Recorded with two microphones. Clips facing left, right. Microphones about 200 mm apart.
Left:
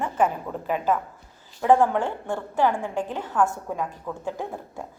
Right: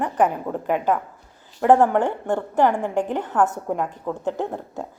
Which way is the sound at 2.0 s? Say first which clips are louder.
Right 5 dB; 20° right (ahead or behind).